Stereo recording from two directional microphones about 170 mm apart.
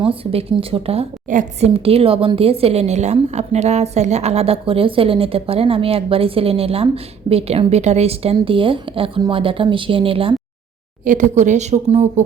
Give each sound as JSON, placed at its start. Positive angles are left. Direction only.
{"t": 0.0, "sound": "a woman's voice", "side_deg": -35}
{"t": 1.3, "sound": "speech", "side_deg": -50}
{"t": 1.7, "sound": "a woman's voice", "side_deg": -35}
{"t": 11.0, "sound": "speech", "side_deg": -50}